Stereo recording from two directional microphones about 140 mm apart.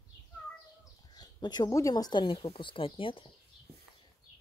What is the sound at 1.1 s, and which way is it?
Speech, 30° left (ahead or behind).